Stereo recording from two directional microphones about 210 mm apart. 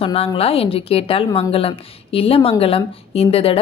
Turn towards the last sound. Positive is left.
turn(degrees=25)  # may be behind; listen again after turning